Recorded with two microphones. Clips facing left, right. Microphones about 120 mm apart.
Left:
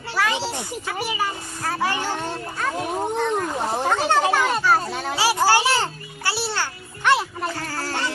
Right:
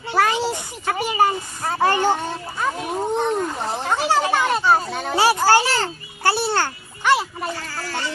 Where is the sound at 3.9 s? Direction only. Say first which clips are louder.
Right 2 dB; 5° right (ahead or behind).